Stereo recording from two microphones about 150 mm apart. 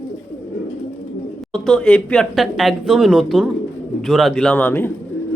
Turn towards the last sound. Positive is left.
turn(degrees=10)  # may be behind; listen again after turning